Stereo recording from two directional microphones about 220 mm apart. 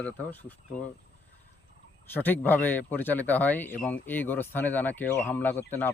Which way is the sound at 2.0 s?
10° left (ahead or behind).